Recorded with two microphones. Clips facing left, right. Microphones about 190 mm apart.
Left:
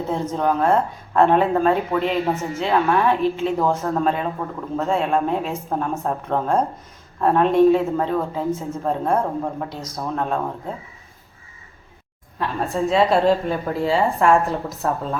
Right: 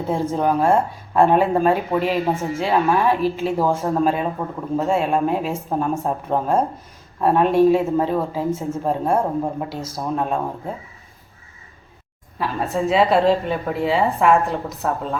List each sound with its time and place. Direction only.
0.1 s speech: 10° right (ahead or behind)
4.8 s speech: 10° right (ahead or behind)
12.4 s a woman's voice: 5° right (ahead or behind)